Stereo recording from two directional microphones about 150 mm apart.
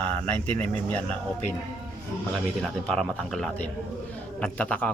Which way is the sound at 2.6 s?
5° left (ahead or behind).